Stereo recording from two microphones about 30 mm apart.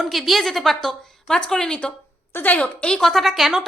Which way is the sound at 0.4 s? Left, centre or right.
Centre.